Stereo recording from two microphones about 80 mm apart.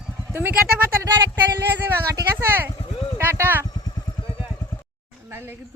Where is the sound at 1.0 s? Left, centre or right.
Right.